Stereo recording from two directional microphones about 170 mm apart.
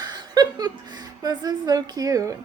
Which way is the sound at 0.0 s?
25° right (ahead or behind).